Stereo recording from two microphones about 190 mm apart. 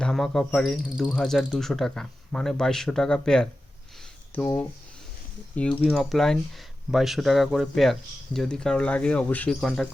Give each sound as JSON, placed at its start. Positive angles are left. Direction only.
{"t": 0.0, "sound": "speech", "side_deg": 0}